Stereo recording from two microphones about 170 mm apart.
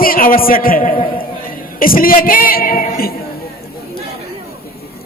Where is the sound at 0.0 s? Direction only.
55° left (ahead or behind).